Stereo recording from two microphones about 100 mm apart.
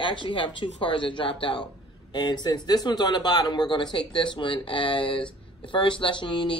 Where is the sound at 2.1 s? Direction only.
45° left (ahead or behind).